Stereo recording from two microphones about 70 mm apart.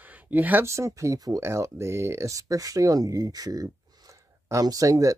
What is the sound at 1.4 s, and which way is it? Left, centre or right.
Speech, right.